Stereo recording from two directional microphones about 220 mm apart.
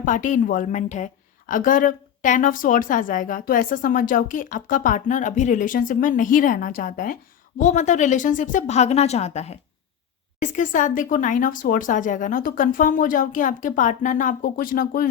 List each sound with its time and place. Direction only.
0.0 s a woman's voice: 35° left (ahead or behind)